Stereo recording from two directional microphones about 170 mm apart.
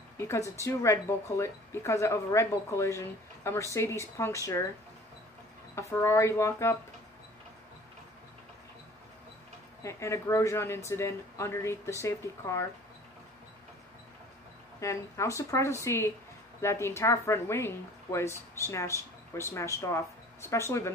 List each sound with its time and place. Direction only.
0.6 s a woman's voice: 15° left (ahead or behind)
5.8 s a woman's voice: 15° left (ahead or behind)
9.8 s a woman's voice: 15° left (ahead or behind)
14.8 s a woman's voice: 20° left (ahead or behind)